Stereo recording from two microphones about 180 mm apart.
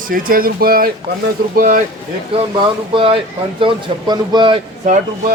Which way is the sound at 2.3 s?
30° right (ahead or behind).